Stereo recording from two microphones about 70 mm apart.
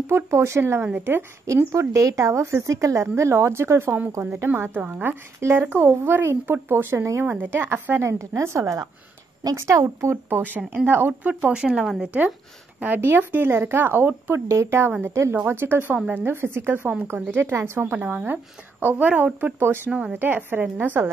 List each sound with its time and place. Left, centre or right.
0.0 s a woman's voice: right
1.7 s a woman's voice: right
4.5 s a woman's voice: right
8.0 s a woman's voice: right
11.2 s speech: right
11.6 s speech: centre
12.8 s a woman's voice: right
14.5 s a woman's voice: right
17.9 s speech: right
19.9 s speech: centre
20.2 s speech: right